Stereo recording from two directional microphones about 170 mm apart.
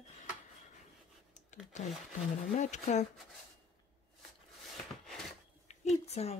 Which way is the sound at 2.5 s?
45° left (ahead or behind).